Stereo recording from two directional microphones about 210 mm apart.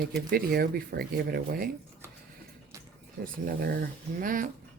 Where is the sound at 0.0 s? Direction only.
45° right (ahead or behind).